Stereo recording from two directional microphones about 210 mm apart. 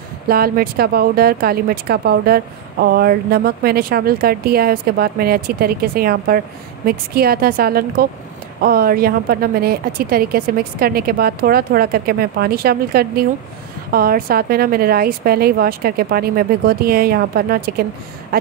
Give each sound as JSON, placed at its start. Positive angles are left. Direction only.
{"t": 0.3, "sound": "speech", "side_deg": -45}